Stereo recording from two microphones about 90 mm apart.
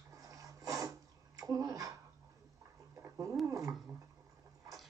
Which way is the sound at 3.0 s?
30° right (ahead or behind).